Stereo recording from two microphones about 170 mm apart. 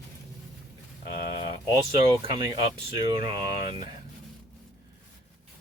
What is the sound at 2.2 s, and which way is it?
Speech, 25° right (ahead or behind).